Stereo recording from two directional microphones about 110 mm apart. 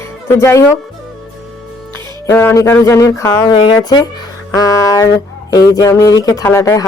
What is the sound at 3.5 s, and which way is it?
Speech, 55° left (ahead or behind).